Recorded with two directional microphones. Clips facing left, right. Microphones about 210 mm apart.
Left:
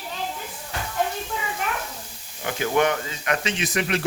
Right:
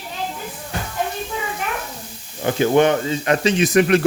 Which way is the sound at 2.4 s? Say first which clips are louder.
Right 7 dB; 30° right (ahead or behind).